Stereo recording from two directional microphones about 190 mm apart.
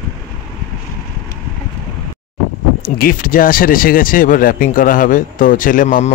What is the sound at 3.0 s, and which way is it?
Speech, 45° left (ahead or behind).